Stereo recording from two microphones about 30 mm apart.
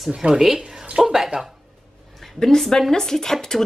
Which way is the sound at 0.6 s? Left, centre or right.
Right.